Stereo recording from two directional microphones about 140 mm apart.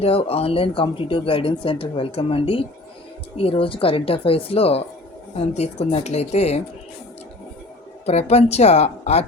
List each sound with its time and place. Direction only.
0.0 s speech: 45° left (ahead or behind)
8.0 s speech: 50° left (ahead or behind)